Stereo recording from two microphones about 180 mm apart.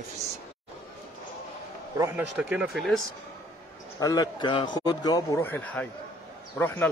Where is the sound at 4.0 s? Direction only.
20° left (ahead or behind).